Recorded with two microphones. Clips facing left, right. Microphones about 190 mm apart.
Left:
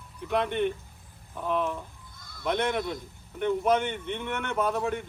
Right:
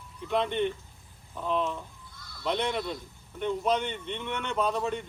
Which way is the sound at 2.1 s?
50° left (ahead or behind).